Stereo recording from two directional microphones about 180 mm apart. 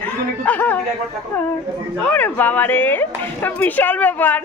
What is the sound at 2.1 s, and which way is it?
A woman's voice, 10° left (ahead or behind).